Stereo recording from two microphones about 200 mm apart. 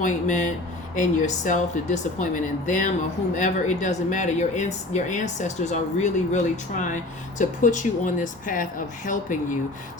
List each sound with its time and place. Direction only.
0.0 s speech: 40° left (ahead or behind)